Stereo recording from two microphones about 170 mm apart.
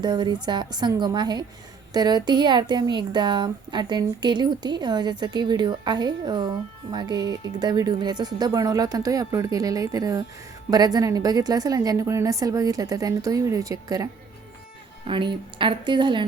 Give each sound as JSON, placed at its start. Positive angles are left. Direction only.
{"t": 0.0, "sound": "speech", "side_deg": -25}